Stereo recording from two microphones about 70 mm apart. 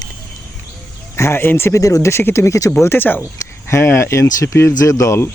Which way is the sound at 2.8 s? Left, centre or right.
Left.